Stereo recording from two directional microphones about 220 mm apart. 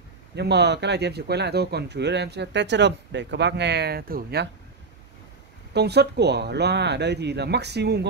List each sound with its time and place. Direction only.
0.4 s speech: 50° right (ahead or behind)
5.7 s speech: 50° right (ahead or behind)